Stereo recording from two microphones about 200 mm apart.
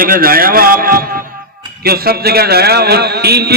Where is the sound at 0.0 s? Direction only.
45° right (ahead or behind).